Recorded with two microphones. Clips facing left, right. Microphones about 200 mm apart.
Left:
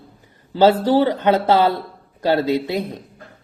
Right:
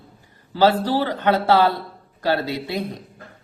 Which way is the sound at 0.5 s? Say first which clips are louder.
Left 4 dB; 20° left (ahead or behind).